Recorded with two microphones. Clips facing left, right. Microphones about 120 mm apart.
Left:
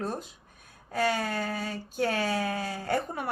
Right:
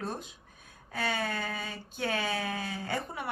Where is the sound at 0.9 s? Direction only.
45° left (ahead or behind).